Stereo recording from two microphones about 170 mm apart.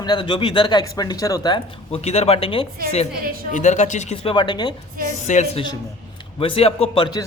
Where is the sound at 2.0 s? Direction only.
40° left (ahead or behind).